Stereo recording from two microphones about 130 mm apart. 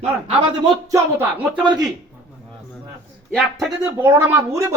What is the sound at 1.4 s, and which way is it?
Speech, 15° right (ahead or behind).